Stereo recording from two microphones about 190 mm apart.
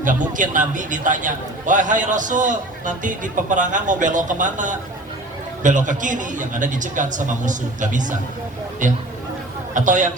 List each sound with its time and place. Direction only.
0.0 s a man's voice: 45° right (ahead or behind)
9.7 s a man's voice: 40° right (ahead or behind)